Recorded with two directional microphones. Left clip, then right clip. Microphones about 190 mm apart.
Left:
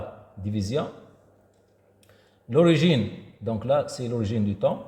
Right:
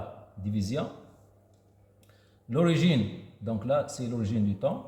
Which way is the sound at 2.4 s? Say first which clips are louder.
Left 7 dB; 30° left (ahead or behind).